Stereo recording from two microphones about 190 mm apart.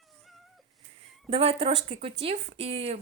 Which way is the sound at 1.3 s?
30° right (ahead or behind).